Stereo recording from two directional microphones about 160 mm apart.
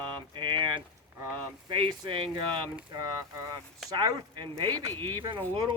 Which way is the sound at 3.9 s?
25° right (ahead or behind).